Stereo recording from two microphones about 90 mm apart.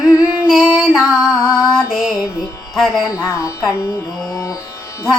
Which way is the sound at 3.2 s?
35° left (ahead or behind).